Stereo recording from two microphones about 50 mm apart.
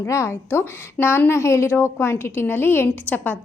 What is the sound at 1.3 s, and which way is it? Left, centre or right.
A woman's voice, left.